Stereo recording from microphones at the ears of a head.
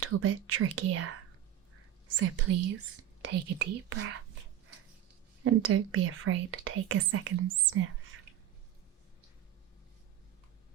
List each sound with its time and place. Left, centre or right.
0.0 s speech: right